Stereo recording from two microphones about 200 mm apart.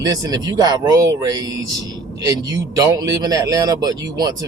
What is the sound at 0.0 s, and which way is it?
A man's voice, 20° right (ahead or behind).